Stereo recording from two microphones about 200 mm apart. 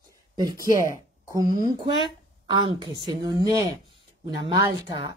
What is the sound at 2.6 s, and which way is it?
Speech, 20° right (ahead or behind).